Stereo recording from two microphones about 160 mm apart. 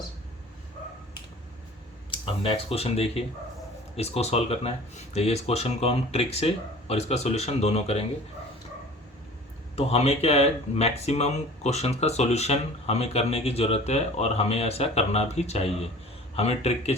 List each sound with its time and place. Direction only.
2.0 s speech: 35° left (ahead or behind)
9.7 s speech: 40° left (ahead or behind)